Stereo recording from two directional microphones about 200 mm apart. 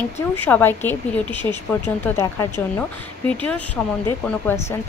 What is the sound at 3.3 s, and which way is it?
Speech, 5° left (ahead or behind).